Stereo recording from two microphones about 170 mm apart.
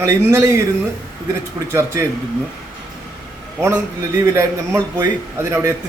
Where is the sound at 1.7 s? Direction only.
15° right (ahead or behind).